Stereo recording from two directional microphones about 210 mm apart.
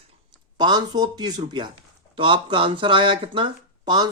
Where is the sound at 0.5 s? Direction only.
20° right (ahead or behind).